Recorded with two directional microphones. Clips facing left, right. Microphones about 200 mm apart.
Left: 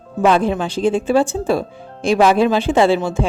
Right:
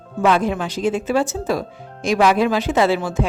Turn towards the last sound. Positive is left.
turn(degrees=25)  # may be behind; listen again after turning